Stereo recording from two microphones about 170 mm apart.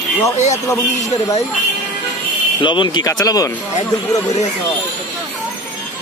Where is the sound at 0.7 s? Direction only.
20° left (ahead or behind).